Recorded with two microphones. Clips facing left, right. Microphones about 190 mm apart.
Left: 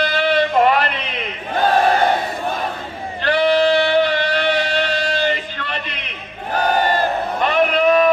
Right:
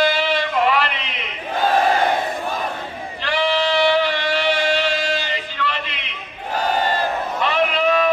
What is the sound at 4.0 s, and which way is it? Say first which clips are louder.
Music: left 3 dB; 45° left (ahead or behind).